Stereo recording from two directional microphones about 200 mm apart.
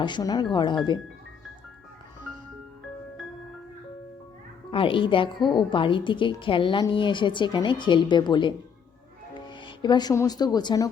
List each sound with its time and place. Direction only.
0.0 s a woman's voice: 20° left (ahead or behind)
4.7 s a woman's voice: 25° left (ahead or behind)